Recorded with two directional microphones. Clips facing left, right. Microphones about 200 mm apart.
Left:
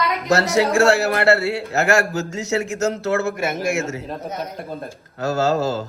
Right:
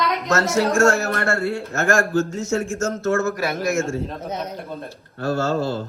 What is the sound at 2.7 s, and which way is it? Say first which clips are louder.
Speech: left 1 dB; 35° left (ahead or behind).